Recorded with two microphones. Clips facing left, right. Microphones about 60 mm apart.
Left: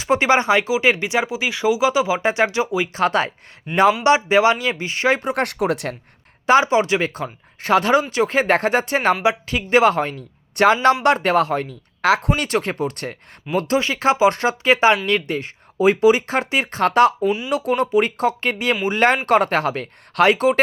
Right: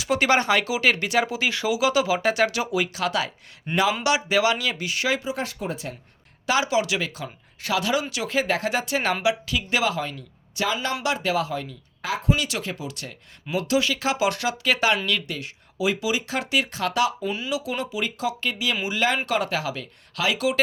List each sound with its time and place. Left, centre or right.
0.0 s speech: left
2.9 s speech: left
3.7 s speech: centre
4.0 s speech: left
5.2 s speech: left
6.4 s speech: left
12.0 s speech: left
12.4 s speech: left
17.2 s speech: centre
17.5 s speech: left